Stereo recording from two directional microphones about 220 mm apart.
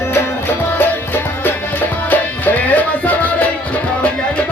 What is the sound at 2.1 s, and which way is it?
Music, 10° left (ahead or behind).